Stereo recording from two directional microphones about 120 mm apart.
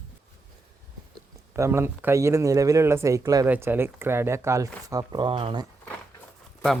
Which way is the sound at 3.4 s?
15° right (ahead or behind).